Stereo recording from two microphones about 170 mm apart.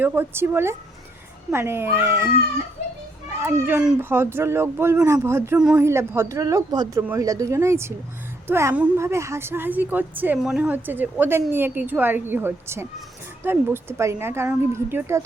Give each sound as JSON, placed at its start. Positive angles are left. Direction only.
{"t": 0.0, "sound": "a woman's voice", "side_deg": -10}
{"t": 3.4, "sound": "a woman's voice", "side_deg": -10}
{"t": 5.5, "sound": "speech", "side_deg": -5}
{"t": 5.8, "sound": "a woman's voice", "side_deg": -15}